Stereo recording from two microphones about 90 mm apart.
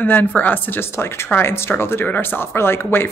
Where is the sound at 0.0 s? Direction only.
20° left (ahead or behind).